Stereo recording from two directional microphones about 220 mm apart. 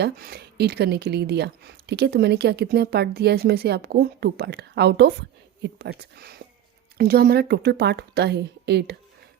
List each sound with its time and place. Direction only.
0.0 s speech: 45° right (ahead or behind)